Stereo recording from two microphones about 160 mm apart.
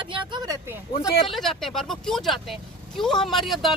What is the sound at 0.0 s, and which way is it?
Vehicle, 30° right (ahead or behind).